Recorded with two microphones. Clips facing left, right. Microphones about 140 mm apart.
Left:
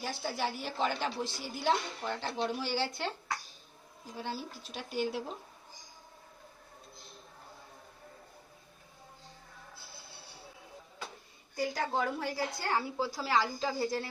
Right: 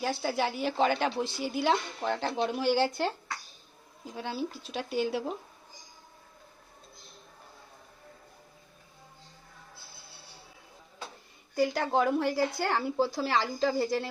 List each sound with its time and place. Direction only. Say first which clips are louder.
0.0 s a woman's voice: right 5 dB; 85° right
2.6 s speech: right 8 dB; 50° right (ahead or behind)
4.2 s speech: right 5 dB; 80° right
11.5 s a woman's voice: right 6 dB; 70° right (ahead or behind)